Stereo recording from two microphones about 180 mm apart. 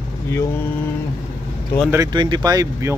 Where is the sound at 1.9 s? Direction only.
20° right (ahead or behind).